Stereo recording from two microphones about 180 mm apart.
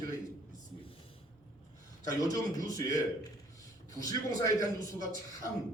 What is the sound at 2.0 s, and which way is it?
Speech, 20° left (ahead or behind).